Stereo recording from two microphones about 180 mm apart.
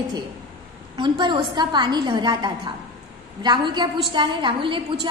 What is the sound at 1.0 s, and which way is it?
A woman's voice, 25° right (ahead or behind).